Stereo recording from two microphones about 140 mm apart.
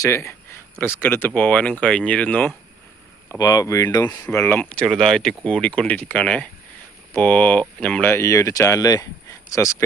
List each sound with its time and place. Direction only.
0.0 s a sound: 20° left (ahead or behind)
0.9 s speech: 15° left (ahead or behind)
3.3 s speech: 25° left (ahead or behind)